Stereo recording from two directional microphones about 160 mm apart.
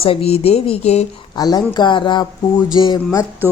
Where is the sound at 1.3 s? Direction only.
25° left (ahead or behind).